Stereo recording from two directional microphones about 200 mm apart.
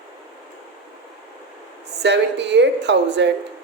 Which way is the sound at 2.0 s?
60° right (ahead or behind).